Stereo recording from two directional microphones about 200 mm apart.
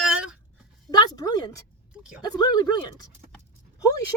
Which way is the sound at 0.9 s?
20° left (ahead or behind).